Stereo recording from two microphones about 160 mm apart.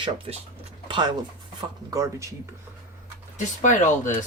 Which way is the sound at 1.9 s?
20° right (ahead or behind).